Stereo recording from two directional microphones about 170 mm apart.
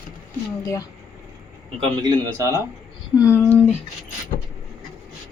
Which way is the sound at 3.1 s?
15° left (ahead or behind).